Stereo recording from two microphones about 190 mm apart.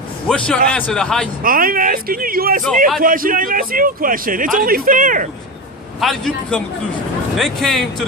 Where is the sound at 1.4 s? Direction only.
50° right (ahead or behind).